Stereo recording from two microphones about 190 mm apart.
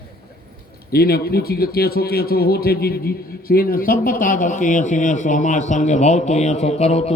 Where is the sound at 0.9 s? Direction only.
55° left (ahead or behind).